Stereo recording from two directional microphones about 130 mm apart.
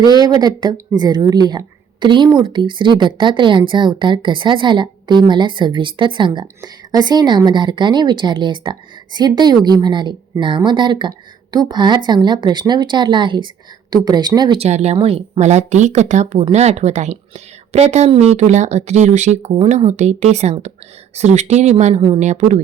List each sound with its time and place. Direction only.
0.1 s speech: 30° right (ahead or behind)
14.6 s speech: 55° right (ahead or behind)